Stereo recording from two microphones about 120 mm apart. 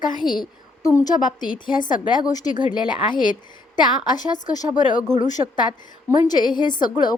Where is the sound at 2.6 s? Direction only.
40° left (ahead or behind).